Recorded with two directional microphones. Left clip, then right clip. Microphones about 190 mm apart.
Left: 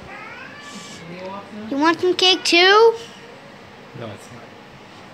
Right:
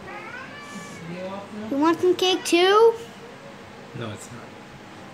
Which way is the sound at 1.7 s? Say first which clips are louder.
Left 3 dB; centre (ahead or behind).